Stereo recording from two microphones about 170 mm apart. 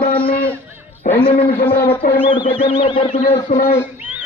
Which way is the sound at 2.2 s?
30° left (ahead or behind).